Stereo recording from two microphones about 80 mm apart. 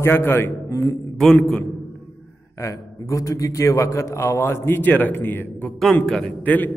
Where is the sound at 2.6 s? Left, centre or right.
Left.